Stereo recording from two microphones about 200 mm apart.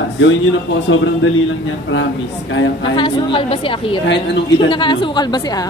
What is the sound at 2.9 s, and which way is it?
A woman's voice, 25° left (ahead or behind).